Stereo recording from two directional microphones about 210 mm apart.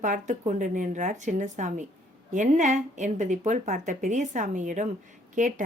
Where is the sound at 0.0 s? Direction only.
35° right (ahead or behind).